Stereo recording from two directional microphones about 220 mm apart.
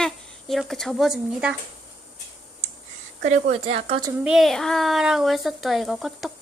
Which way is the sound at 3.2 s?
35° right (ahead or behind).